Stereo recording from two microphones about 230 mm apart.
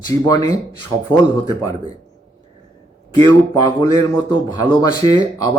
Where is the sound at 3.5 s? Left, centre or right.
Centre.